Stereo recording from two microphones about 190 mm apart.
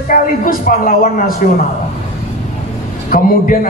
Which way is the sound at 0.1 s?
45° left (ahead or behind).